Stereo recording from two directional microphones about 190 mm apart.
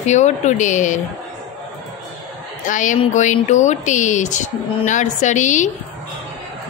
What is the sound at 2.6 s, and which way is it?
Speech, 40° left (ahead or behind).